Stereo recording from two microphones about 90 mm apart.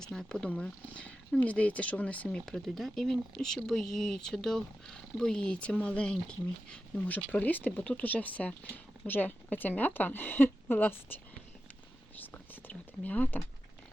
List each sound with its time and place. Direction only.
0.0 s speech: 5° left (ahead or behind)